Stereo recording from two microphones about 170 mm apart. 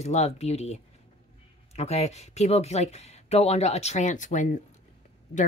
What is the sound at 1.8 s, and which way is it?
Speech, 40° left (ahead or behind).